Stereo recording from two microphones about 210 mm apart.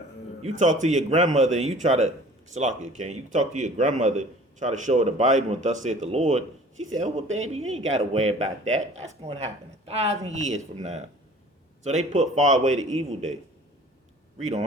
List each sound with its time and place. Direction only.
0.8 s speech: 35° right (ahead or behind)